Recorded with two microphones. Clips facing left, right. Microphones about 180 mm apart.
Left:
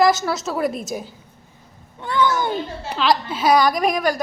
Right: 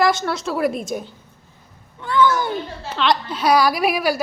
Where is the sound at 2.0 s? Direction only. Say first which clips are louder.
Right 2 dB; 20° left (ahead or behind).